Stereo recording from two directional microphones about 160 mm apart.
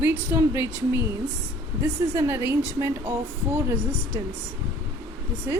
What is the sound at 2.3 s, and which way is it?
Speech, 15° right (ahead or behind).